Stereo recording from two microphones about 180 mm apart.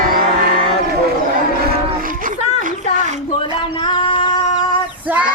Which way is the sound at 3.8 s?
25° left (ahead or behind).